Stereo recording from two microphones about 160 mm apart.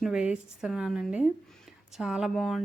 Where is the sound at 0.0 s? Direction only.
5° right (ahead or behind).